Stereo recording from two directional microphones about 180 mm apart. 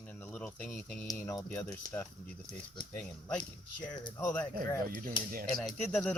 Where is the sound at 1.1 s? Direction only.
20° left (ahead or behind).